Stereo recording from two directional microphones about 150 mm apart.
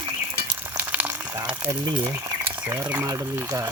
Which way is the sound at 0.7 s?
10° right (ahead or behind).